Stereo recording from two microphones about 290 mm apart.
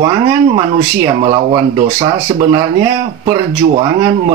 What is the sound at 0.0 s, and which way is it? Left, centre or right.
Speech, centre.